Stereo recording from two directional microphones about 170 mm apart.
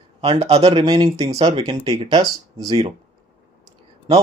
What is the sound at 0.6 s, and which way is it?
Speech, 25° right (ahead or behind).